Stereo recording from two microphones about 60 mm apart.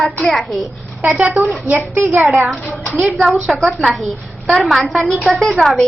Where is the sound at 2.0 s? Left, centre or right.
Right.